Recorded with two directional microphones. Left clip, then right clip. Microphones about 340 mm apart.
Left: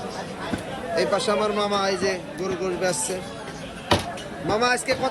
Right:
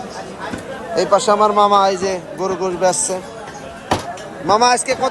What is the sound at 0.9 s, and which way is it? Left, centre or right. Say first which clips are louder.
Speech: right 9 dB; centre.